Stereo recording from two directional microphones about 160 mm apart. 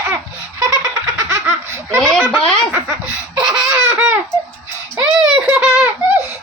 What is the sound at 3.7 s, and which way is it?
Baby laughter, 15° right (ahead or behind).